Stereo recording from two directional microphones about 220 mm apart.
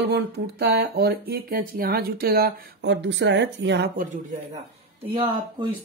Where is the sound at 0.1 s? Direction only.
50° right (ahead or behind).